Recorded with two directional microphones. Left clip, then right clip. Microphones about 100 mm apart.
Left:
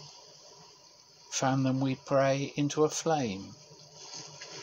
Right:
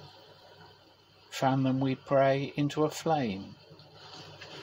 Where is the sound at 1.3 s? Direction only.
40° left (ahead or behind).